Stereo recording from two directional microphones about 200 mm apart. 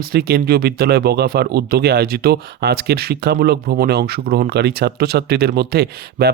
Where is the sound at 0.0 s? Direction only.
50° right (ahead or behind).